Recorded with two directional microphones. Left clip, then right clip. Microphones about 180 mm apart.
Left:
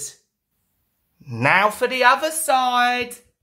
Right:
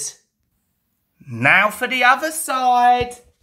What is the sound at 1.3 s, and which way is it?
Speech, 5° left (ahead or behind).